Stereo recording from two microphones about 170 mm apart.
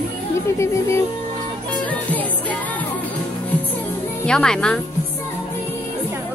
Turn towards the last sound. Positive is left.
turn(degrees=5)  # may be behind; listen again after turning